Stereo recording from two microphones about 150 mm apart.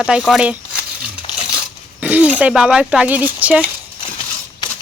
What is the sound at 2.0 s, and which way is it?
Speech, 10° right (ahead or behind).